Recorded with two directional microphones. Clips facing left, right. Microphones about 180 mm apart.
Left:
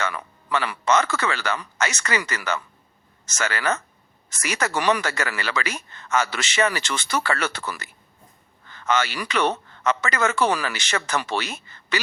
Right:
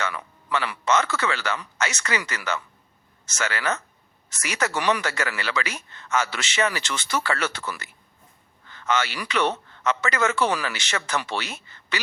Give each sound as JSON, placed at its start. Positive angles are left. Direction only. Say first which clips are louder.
{"t": 0.0, "sound": "speech", "louder": "left 2 dB", "side_deg": 45}
{"t": 7.6, "sound": "speech", "louder": "left 1 dB", "side_deg": 40}